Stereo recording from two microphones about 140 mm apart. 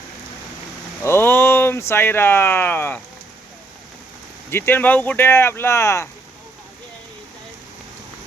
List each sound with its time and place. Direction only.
1.0 s speech: 15° left (ahead or behind)
4.5 s speech: 15° left (ahead or behind)